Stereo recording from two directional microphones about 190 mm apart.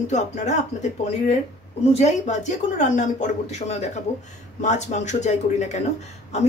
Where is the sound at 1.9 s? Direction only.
35° left (ahead or behind).